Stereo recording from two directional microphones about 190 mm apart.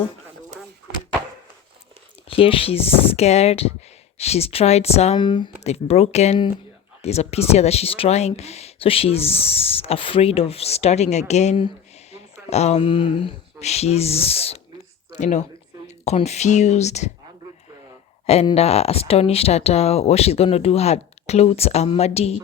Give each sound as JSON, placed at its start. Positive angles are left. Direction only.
{"t": 2.3, "sound": "speech", "side_deg": 30}
{"t": 18.3, "sound": "speech", "side_deg": 30}